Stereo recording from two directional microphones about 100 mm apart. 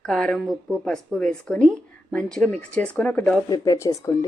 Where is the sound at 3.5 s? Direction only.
30° left (ahead or behind).